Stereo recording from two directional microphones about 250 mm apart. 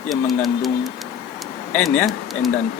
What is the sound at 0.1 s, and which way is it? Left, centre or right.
Speech, centre.